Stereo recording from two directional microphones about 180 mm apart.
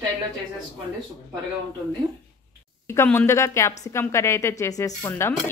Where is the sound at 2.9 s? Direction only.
15° left (ahead or behind).